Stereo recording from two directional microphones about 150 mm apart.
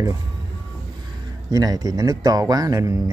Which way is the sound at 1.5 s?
25° right (ahead or behind).